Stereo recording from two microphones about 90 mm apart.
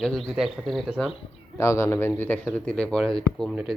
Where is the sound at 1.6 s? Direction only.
30° left (ahead or behind).